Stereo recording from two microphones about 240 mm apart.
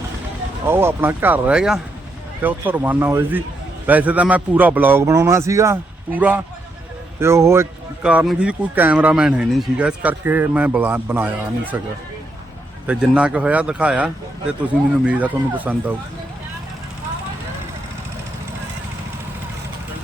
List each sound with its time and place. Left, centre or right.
0.7 s speech: centre
12.9 s speech: centre